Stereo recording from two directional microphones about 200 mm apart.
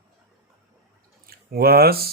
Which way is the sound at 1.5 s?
50° right (ahead or behind).